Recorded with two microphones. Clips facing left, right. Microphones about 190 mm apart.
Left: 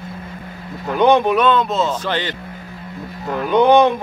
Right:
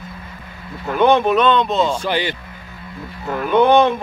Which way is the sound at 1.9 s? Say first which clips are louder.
Right 1 dB; 10° right (ahead or behind).